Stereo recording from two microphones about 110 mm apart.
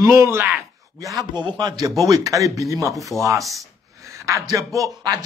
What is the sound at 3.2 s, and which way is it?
A man's voice, 30° right (ahead or behind).